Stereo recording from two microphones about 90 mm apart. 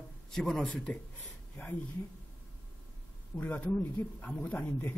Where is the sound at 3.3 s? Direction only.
20° left (ahead or behind).